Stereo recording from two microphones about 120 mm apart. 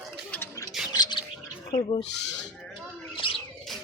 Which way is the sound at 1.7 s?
55° left (ahead or behind).